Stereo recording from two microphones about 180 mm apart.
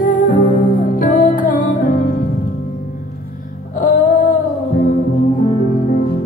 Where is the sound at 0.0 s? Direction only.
45° left (ahead or behind).